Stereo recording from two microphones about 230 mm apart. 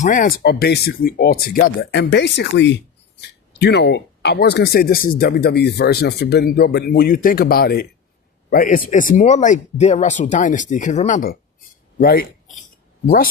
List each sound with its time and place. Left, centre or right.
0.0 s speech: left